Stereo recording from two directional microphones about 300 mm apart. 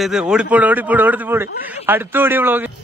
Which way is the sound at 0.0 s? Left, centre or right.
Centre.